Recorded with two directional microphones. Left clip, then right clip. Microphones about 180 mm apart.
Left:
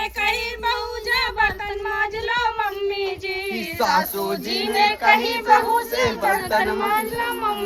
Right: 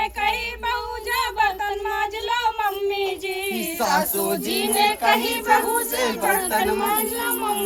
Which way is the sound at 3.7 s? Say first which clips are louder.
Left 2 dB; 15° right (ahead or behind).